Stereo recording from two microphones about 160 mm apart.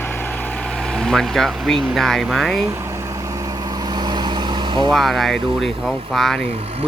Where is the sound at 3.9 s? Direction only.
25° right (ahead or behind).